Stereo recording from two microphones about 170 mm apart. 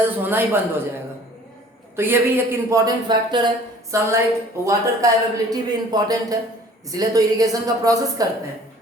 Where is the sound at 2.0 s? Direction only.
15° right (ahead or behind).